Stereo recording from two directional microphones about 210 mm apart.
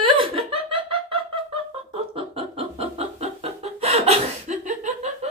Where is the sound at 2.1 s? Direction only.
25° right (ahead or behind).